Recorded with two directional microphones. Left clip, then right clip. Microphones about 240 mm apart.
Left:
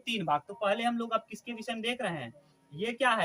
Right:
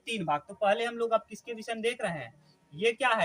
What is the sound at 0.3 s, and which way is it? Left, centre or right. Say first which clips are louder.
A man's voice: right 3 dB; centre.